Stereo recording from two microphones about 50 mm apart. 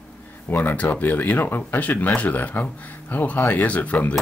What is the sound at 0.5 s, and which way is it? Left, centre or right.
Speech, left.